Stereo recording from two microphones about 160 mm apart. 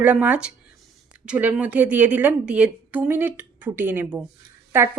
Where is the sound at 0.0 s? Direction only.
10° right (ahead or behind).